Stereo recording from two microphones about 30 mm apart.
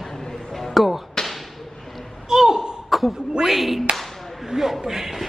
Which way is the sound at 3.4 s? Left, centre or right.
Centre.